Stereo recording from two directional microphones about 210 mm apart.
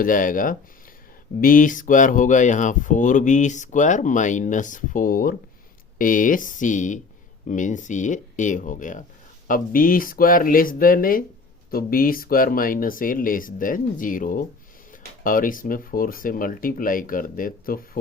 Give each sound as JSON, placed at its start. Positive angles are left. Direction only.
{"t": 0.0, "sound": "speech", "side_deg": 40}